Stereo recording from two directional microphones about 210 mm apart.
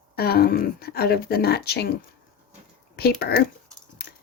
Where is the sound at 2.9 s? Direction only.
50° left (ahead or behind).